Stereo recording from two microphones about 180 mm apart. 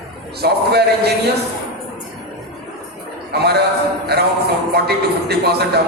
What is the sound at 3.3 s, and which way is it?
A man's voice, 65° right (ahead or behind).